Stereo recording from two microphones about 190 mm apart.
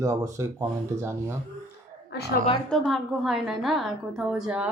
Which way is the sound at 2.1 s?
65° left (ahead or behind).